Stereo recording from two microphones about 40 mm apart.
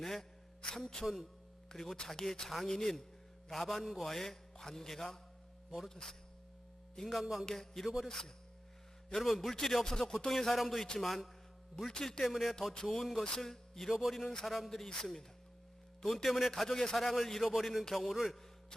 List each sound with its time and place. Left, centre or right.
0.0 s a man's voice: centre
7.2 s a man's voice: centre
7.4 s a man's voice: centre
9.1 s a man's voice: centre
12.2 s a man's voice: centre
12.7 s a man's voice: left
13.0 s a man's voice: centre
13.2 s a man's voice: centre
16.0 s a man's voice: centre